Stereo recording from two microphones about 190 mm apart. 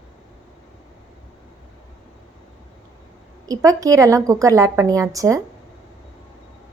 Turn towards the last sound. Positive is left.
turn(degrees=-15)  # may be behind; listen again after turning